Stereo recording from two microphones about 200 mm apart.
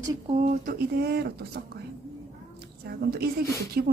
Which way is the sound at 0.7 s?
50° right (ahead or behind).